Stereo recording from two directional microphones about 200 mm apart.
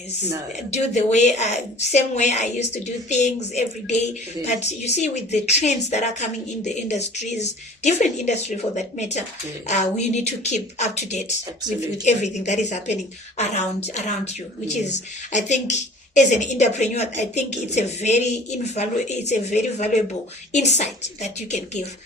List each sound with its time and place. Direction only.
0.7 s a woman's voice: 35° left (ahead or behind)